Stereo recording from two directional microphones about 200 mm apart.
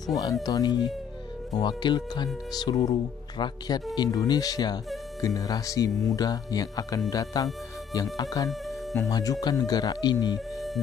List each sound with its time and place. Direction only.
0.2 s speech: 20° left (ahead or behind)